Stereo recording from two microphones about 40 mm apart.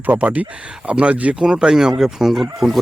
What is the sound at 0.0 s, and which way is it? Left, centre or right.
Speech, right.